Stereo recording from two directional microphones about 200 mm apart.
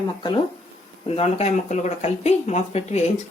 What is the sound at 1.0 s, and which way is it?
Speech, 30° left (ahead or behind).